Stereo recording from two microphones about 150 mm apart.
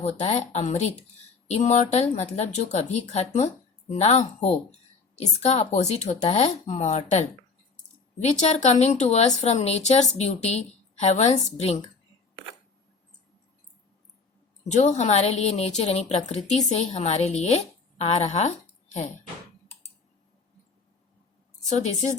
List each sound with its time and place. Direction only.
0.0 s a woman's voice: 45° left (ahead or behind)
14.7 s a woman's voice: 50° left (ahead or behind)
21.7 s a woman's voice: 50° left (ahead or behind)